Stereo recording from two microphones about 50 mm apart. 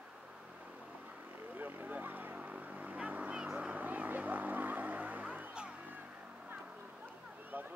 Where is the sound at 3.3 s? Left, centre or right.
Right.